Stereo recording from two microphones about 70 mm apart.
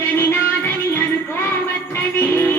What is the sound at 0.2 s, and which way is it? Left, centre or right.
Music, left.